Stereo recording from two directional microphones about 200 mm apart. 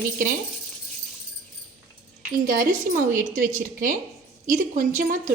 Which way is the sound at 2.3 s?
45° right (ahead or behind).